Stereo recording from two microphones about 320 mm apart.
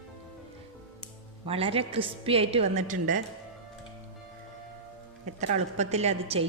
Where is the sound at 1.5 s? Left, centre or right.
Centre.